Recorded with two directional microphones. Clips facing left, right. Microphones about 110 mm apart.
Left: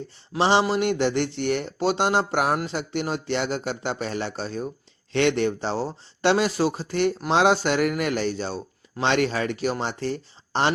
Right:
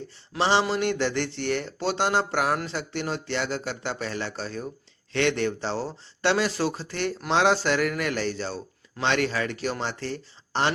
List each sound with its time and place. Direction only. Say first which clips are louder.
0.3 s a man's voice: left 3 dB; 15° left (ahead or behind)